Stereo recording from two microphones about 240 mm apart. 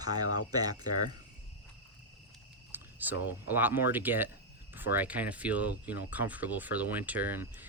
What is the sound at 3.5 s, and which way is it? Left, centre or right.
Speech, centre.